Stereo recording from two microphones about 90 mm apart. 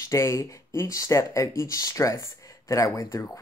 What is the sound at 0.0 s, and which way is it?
Speech, 35° left (ahead or behind).